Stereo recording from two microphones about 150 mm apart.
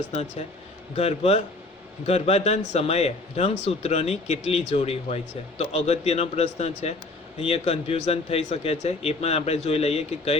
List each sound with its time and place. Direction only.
0.1 s a man's voice: 45° left (ahead or behind)